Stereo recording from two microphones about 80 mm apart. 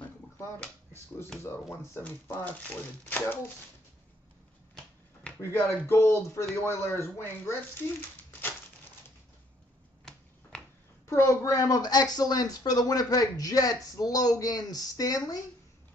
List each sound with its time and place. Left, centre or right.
1.4 s speech: left
2.3 s speech: left
5.4 s speech: left
11.1 s speech: left